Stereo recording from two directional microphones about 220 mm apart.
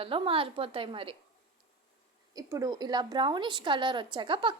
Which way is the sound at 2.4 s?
15° right (ahead or behind).